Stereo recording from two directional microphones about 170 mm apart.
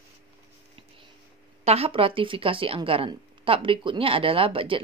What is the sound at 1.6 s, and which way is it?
Speech, 35° right (ahead or behind).